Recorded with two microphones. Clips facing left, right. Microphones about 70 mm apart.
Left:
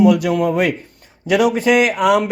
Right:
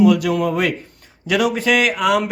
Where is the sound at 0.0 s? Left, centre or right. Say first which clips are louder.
Left 1 dB; centre.